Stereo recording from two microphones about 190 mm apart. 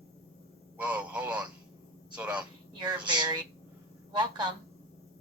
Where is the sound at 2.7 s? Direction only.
25° right (ahead or behind).